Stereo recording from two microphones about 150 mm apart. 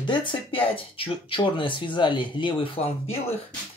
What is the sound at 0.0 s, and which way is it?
Speech, 35° left (ahead or behind).